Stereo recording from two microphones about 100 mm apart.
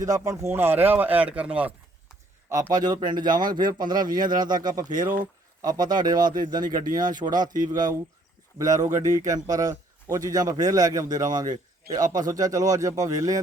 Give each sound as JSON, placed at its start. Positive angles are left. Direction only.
{"t": 0.0, "sound": "speech", "side_deg": -35}
{"t": 2.7, "sound": "a man's voice", "side_deg": -45}